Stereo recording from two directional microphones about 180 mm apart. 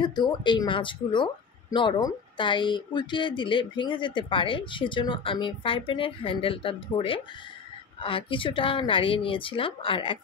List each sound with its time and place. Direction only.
0.0 s speech: 25° left (ahead or behind)